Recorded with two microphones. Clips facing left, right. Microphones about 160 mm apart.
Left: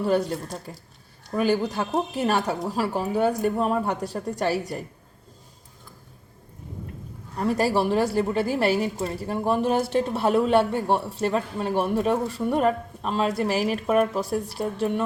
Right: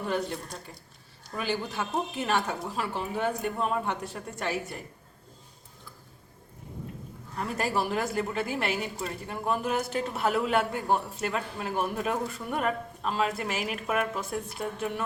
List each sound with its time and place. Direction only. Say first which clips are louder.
1.3 s a woman's voice: left 9 dB; 45° left (ahead or behind)
7.3 s a woman's voice: left 7 dB; 35° left (ahead or behind)